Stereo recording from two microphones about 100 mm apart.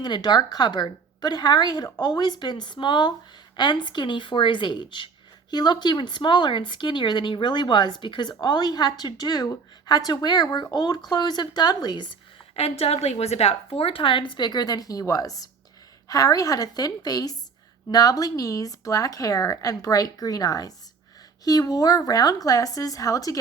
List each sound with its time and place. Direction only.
0.0 s speech: 45° left (ahead or behind)
12.5 s a woman's voice: 90° left; by 23.4 s 35° left (ahead or behind)